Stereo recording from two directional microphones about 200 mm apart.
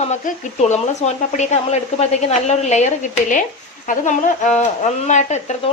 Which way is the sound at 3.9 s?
40° left (ahead or behind).